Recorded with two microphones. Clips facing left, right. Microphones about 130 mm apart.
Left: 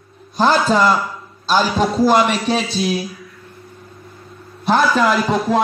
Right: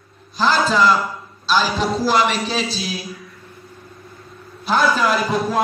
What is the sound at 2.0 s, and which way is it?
Speech, 50° left (ahead or behind).